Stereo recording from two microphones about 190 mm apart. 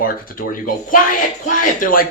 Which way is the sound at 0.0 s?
45° left (ahead or behind).